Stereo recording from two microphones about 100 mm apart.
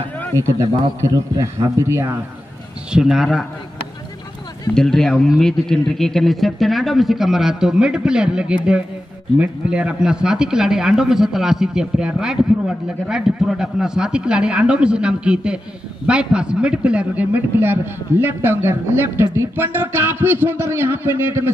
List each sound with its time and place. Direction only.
1.3 s a man's voice: 35° right (ahead or behind)
2.9 s a man's voice: 5° right (ahead or behind)
4.7 s a man's voice: 5° left (ahead or behind); by 21.5 s 25° right (ahead or behind)